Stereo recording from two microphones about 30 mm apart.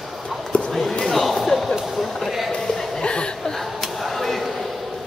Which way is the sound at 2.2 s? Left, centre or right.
Centre.